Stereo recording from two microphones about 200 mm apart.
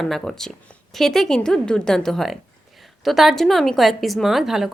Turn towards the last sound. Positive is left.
turn(degrees=0)  # may be behind; listen again after turning